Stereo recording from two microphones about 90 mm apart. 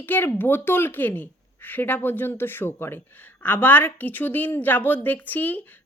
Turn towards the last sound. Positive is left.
turn(degrees=20)  # may be behind; listen again after turning